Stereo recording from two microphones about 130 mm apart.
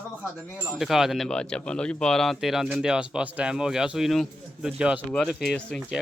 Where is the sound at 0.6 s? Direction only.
Centre (ahead or behind).